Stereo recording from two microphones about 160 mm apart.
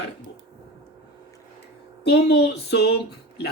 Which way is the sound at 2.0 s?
90° left.